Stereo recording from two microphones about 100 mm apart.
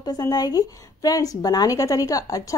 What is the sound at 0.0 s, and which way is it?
A woman's voice, 40° left (ahead or behind).